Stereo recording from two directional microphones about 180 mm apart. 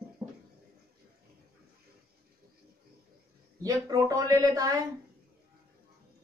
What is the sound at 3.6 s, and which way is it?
Speech, 20° right (ahead or behind).